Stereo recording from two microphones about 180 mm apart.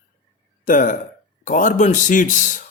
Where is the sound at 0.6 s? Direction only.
45° left (ahead or behind).